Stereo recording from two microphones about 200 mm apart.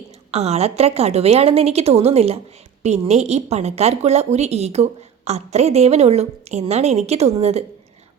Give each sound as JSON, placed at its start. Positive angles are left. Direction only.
{"t": 0.3, "sound": "a woman's voice", "side_deg": -30}